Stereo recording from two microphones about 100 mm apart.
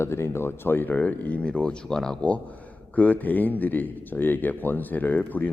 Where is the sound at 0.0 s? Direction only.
25° left (ahead or behind).